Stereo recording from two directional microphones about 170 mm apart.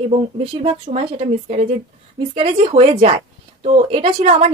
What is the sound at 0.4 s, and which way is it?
A woman's voice, 35° right (ahead or behind).